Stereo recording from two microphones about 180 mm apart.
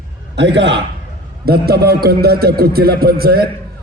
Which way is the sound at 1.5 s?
60° right (ahead or behind).